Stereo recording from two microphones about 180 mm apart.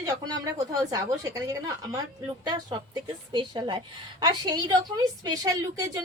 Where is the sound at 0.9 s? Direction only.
20° right (ahead or behind).